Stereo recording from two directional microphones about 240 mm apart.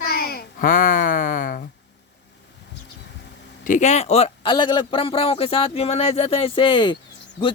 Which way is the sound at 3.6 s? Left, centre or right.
Left.